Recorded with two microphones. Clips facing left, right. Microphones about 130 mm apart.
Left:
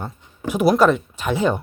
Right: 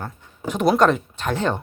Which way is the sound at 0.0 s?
10° left (ahead or behind).